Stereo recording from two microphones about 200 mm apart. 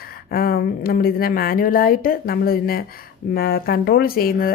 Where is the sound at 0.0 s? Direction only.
50° left (ahead or behind).